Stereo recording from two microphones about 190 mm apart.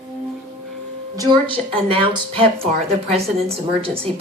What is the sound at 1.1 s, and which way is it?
A woman's voice, 20° right (ahead or behind).